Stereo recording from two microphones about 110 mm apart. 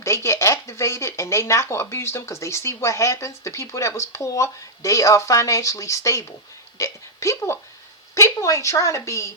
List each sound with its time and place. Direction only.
0.0 s a woman's voice: 25° left (ahead or behind)